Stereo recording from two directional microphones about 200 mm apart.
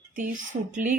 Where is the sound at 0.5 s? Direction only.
40° right (ahead or behind).